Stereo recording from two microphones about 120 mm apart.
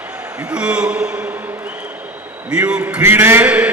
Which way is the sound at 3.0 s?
20° right (ahead or behind).